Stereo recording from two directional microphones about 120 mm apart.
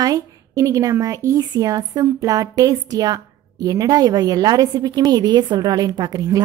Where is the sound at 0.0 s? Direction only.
30° right (ahead or behind).